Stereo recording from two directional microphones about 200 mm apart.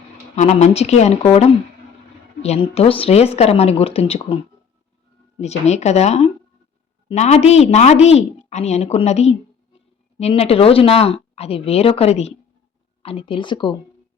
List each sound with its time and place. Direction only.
0.3 s a woman's voice: 35° left (ahead or behind)
5.4 s a woman's voice: 35° left (ahead or behind)